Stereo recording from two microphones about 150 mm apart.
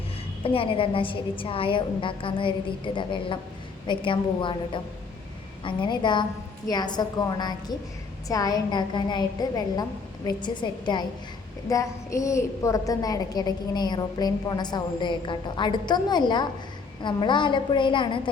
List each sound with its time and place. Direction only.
0.4 s a woman's voice: 35° left (ahead or behind)